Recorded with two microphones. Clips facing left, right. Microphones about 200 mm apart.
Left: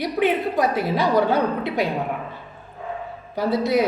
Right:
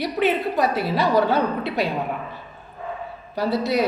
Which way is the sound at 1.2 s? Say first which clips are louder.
Left 1 dB; 20° left (ahead or behind).